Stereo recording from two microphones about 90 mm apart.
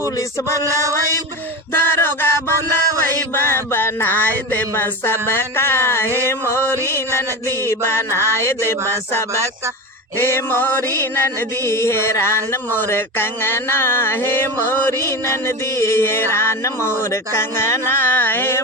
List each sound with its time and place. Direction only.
0.2 s a sound: 35° left (ahead or behind)
0.6 s speech: 35° right (ahead or behind)
1.7 s music: 25° left (ahead or behind)
7.7 s music: 30° left (ahead or behind)
8.8 s speech: 35° right (ahead or behind)
10.2 s music: 25° left (ahead or behind)